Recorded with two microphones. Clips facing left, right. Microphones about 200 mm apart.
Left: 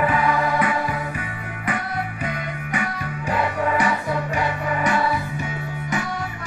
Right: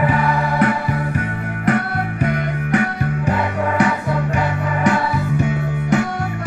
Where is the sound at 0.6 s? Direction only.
60° right (ahead or behind).